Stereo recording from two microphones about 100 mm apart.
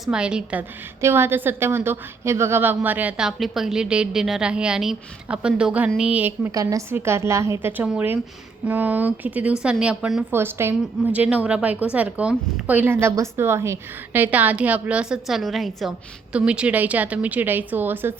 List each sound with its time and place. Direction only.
0.0 s a woman's voice: 10° right (ahead or behind)
1.0 s a woman's voice: 25° right (ahead or behind)
6.5 s a woman's voice: 35° right (ahead or behind)
6.9 s a woman's voice: 25° right (ahead or behind); by 10.2 s 5° right (ahead or behind)
10.3 s a woman's voice: 25° right (ahead or behind)